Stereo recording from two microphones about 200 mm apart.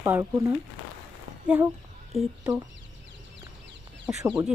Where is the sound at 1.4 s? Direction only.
10° right (ahead or behind).